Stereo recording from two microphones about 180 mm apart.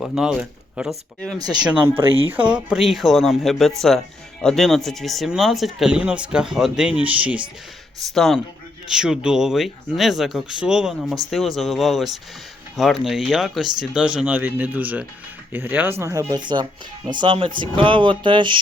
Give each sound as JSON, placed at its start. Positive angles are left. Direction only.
{"t": 0.0, "sound": "speech", "side_deg": -5}
{"t": 1.4, "sound": "speech", "side_deg": -20}